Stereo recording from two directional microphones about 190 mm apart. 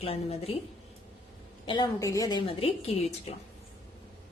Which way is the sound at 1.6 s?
25° left (ahead or behind).